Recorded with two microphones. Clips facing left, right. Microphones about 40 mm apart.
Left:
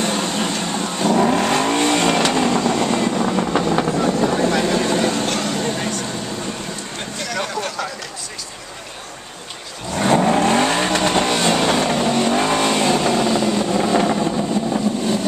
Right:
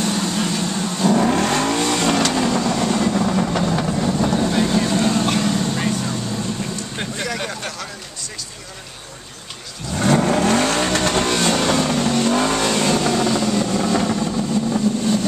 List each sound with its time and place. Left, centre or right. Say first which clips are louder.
0.0 s vehicle: left 1 dB; left
0.5 s vehicle: even; left
1.0 s vehicle: left 1 dB; centre
1.7 s vehicle: left 2 dB; left
3.7 s vehicle: left 2 dB; left
4.5 s vehicle: left 1 dB; left
5.2 s vehicle: right 1 dB; centre
7.2 s a sound: left 2 dB; centre
10.1 s vehicle: left 2 dB; centre